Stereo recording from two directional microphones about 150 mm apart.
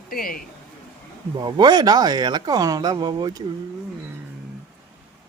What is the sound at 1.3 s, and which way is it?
Speech, 30° right (ahead or behind).